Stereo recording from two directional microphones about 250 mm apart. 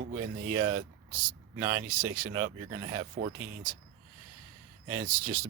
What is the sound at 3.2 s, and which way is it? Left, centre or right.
Speech, right.